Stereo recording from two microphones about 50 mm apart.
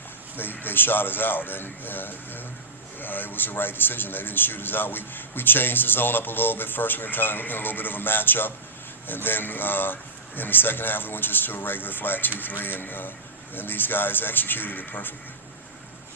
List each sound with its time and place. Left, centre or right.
0.3 s a man's voice: left